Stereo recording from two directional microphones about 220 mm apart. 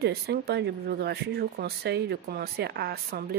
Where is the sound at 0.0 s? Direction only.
50° right (ahead or behind).